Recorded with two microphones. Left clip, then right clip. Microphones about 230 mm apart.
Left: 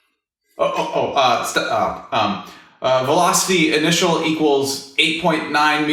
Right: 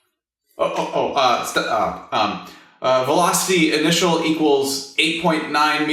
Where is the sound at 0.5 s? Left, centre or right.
Centre.